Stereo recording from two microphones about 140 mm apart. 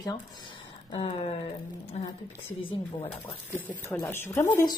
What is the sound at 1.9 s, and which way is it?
Speech, 50° left (ahead or behind).